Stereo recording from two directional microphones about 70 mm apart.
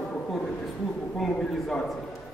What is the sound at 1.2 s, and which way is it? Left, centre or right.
Speech, centre.